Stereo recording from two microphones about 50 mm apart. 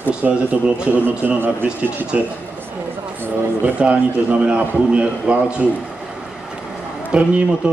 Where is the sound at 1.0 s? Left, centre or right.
Right.